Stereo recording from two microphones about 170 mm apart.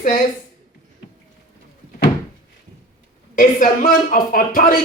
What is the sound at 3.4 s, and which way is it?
Speech, 55° left (ahead or behind).